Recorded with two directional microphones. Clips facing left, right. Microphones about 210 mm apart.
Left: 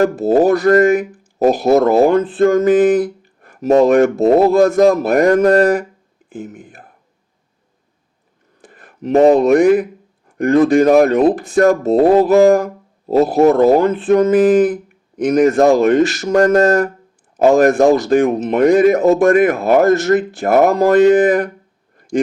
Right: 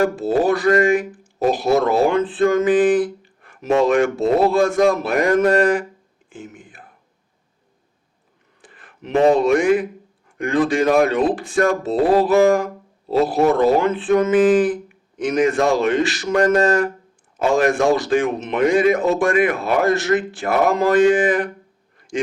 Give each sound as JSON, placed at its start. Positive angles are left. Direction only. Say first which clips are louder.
{"t": 0.2, "sound": "speech", "louder": "left 5 dB", "side_deg": 50}
{"t": 8.6, "sound": "a sound", "louder": "left 11 dB", "side_deg": 40}
{"t": 9.3, "sound": "speech", "louder": "left 5 dB", "side_deg": 55}
{"t": 10.2, "sound": "speech", "louder": "left 7 dB", "side_deg": 40}